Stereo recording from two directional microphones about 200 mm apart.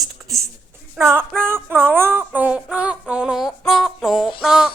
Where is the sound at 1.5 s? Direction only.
10° right (ahead or behind).